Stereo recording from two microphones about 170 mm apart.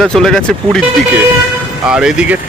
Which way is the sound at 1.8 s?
5° right (ahead or behind).